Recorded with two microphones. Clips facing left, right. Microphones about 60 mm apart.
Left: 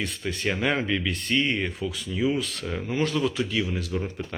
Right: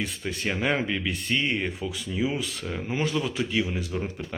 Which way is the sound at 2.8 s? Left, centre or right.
Centre.